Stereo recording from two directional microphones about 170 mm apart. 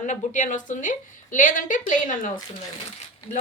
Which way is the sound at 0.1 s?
45° left (ahead or behind).